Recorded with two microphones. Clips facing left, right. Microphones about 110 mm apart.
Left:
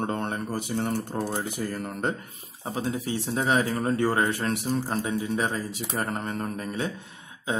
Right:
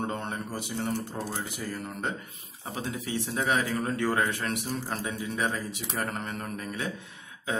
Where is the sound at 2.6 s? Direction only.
30° left (ahead or behind).